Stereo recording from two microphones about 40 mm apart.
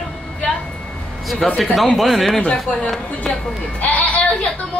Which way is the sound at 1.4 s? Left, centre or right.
Centre.